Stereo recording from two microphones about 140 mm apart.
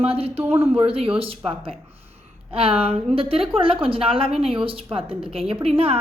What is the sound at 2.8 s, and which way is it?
A woman's voice, 40° right (ahead or behind).